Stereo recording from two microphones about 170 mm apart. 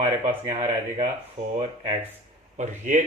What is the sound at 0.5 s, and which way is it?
Speech, 40° right (ahead or behind).